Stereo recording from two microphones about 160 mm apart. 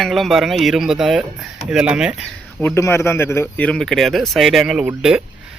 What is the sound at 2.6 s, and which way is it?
Speech, 15° left (ahead or behind).